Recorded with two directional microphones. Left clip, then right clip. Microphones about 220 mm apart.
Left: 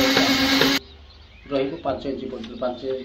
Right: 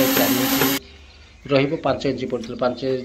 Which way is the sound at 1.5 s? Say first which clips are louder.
Right 5 dB; 30° right (ahead or behind).